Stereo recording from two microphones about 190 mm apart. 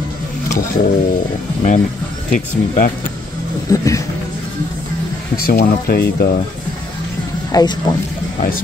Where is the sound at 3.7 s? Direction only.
15° left (ahead or behind).